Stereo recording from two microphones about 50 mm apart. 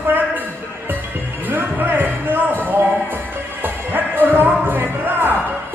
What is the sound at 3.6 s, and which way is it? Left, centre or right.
Music, right.